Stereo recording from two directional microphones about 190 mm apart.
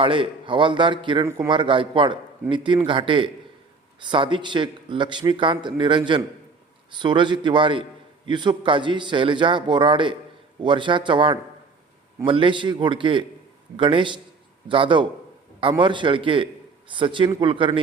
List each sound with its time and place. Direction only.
0.0 s speech: 25° right (ahead or behind)